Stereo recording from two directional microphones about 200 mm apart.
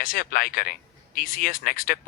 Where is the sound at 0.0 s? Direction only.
45° left (ahead or behind).